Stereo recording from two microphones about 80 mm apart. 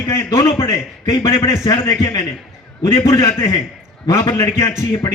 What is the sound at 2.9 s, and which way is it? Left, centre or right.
A man's voice, left.